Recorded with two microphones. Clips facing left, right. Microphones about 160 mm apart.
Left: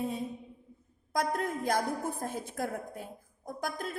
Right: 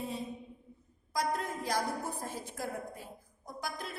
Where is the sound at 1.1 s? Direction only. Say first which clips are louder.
Left 3 dB; 55° left (ahead or behind).